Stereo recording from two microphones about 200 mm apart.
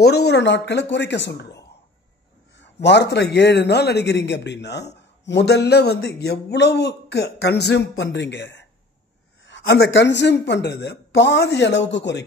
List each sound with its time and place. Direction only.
0.0 s a man's voice: 55° left (ahead or behind)